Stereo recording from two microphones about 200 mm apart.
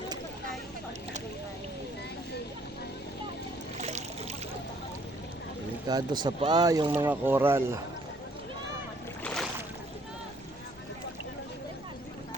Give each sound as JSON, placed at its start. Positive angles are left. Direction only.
{"t": 3.8, "sound": "a sound", "side_deg": -35}
{"t": 5.9, "sound": "speech", "side_deg": -20}
{"t": 9.2, "sound": "boat", "side_deg": 5}